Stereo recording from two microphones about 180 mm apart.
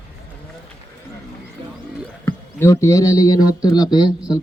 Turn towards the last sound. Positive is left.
turn(degrees=25)  # may be behind; listen again after turning